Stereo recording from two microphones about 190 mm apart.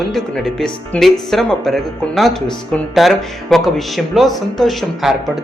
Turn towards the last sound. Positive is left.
turn(degrees=0)  # may be behind; listen again after turning